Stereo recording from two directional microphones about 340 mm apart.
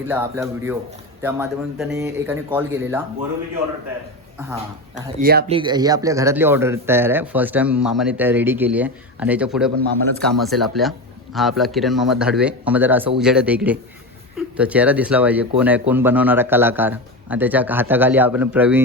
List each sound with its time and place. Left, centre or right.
0.1 s speech: centre
5.2 s speech: right
5.5 s speech: centre